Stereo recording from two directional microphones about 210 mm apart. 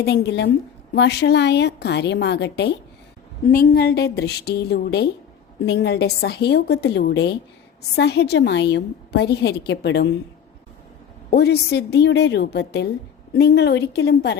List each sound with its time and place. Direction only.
0.0 s a woman's voice: 50° left (ahead or behind)
11.3 s a woman's voice: 50° left (ahead or behind)